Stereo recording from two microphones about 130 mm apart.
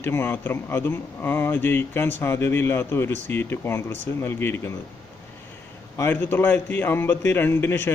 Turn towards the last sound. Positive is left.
turn(degrees=20)  # may be behind; listen again after turning